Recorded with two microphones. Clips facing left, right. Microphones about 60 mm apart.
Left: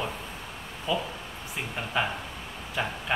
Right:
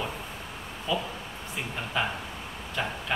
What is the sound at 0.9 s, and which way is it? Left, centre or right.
Speech, centre.